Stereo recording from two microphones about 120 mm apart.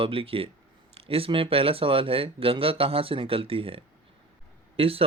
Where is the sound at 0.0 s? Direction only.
50° right (ahead or behind).